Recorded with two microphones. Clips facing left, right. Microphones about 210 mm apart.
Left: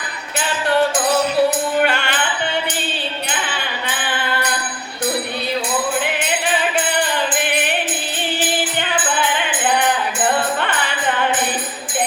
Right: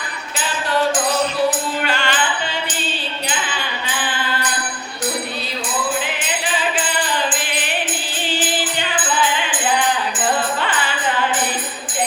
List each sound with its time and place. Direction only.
1.5 s music: 60° left (ahead or behind)
6.0 s music: 60° left (ahead or behind)